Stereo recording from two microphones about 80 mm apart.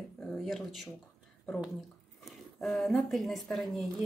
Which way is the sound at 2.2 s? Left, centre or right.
Centre.